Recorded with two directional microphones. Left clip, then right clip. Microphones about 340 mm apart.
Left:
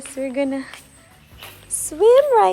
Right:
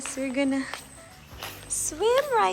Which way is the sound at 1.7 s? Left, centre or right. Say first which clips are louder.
Left 10 dB; centre.